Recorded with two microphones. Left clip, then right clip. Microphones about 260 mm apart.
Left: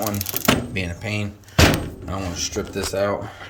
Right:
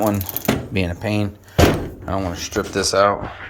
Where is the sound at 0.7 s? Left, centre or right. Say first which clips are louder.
Right 5 dB; centre.